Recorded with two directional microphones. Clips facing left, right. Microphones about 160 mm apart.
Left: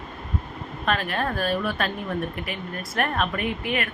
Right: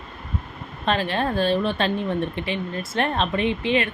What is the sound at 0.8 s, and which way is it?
Speech, 30° right (ahead or behind).